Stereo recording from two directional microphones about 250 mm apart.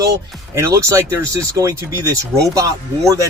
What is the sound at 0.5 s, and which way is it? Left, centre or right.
Speech, centre.